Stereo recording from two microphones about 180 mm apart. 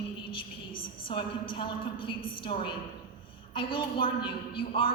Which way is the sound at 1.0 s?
30° left (ahead or behind).